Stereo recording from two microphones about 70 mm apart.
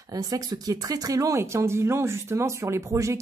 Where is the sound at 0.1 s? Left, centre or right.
Right.